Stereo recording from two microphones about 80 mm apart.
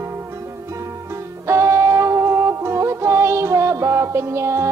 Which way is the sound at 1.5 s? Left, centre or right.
Right.